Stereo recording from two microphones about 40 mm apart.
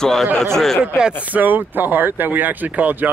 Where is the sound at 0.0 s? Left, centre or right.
Centre.